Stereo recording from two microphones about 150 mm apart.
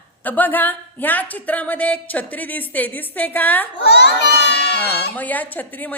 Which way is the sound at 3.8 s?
90° left.